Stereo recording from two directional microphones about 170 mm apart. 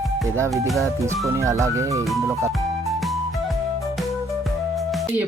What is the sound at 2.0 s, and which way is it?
Speech, centre (ahead or behind).